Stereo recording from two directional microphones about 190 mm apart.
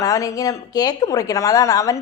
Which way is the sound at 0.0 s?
15° left (ahead or behind).